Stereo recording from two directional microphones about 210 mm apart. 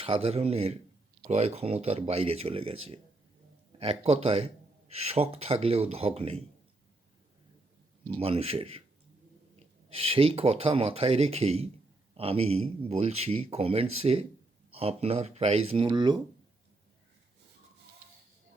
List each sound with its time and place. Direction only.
0.0 s speech: 25° right (ahead or behind)
8.2 s speech: 30° right (ahead or behind)